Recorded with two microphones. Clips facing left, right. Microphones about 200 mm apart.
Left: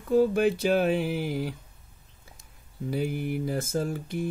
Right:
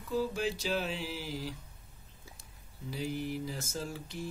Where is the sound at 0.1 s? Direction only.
55° left (ahead or behind).